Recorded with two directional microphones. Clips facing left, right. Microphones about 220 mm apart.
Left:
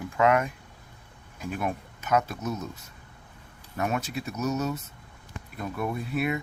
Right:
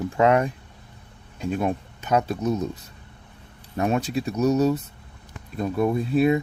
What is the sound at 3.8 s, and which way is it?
Speech, 30° right (ahead or behind).